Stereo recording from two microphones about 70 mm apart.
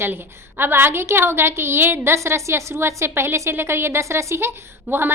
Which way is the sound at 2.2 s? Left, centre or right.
Right.